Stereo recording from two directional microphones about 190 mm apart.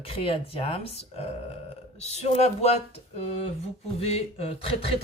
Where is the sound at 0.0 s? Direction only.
30° left (ahead or behind).